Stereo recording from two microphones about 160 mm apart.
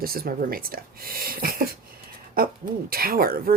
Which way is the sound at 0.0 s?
70° right (ahead or behind).